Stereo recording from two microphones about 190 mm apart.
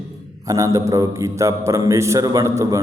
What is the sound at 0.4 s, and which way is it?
A man's voice, 15° right (ahead or behind).